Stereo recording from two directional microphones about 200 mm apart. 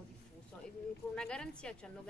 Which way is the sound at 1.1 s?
5° left (ahead or behind).